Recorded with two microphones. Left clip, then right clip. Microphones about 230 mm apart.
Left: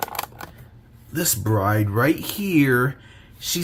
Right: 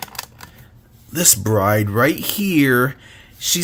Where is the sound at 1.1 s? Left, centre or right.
Right.